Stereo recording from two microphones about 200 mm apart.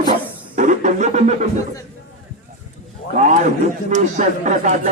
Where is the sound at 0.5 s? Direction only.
40° right (ahead or behind).